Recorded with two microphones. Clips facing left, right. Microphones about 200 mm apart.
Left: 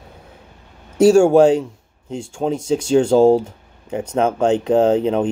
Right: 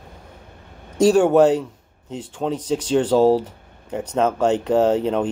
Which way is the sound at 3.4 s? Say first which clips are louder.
Left 2 dB; 10° left (ahead or behind).